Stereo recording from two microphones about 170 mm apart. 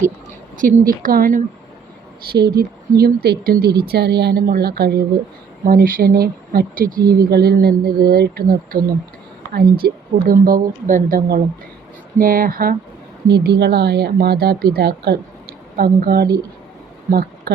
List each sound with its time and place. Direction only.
0.5 s speech: 50° right (ahead or behind)
2.6 s speech: 60° right (ahead or behind)
13.2 s speech: 70° right (ahead or behind)